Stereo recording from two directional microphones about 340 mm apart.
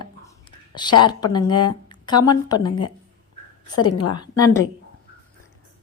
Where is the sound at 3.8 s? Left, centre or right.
Left.